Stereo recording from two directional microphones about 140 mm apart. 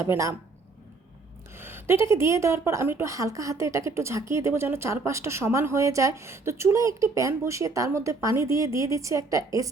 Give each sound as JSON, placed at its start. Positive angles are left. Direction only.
{"t": 0.0, "sound": "speech", "side_deg": -20}
{"t": 1.5, "sound": "speech", "side_deg": -15}